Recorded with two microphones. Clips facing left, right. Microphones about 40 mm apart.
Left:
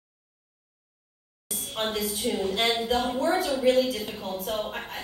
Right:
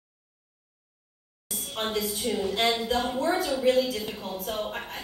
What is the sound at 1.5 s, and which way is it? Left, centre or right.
A woman's voice, centre.